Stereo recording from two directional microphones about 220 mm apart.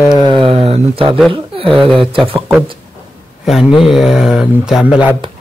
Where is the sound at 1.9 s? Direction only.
25° right (ahead or behind).